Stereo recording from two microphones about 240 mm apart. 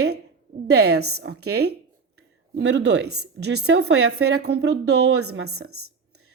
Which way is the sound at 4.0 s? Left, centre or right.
Right.